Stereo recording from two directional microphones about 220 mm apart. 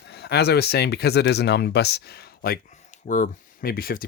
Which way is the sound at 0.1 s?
50° left (ahead or behind).